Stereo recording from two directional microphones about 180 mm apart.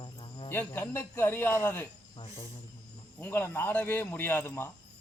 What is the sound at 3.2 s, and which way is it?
A man's voice, 15° left (ahead or behind).